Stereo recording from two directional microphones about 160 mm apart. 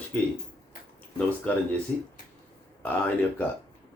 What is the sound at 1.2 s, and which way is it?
Speech, 10° left (ahead or behind).